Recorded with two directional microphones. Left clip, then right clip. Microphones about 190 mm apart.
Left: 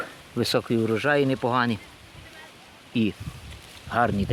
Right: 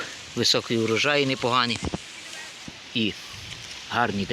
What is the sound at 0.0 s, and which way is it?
Speech, 50° left (ahead or behind).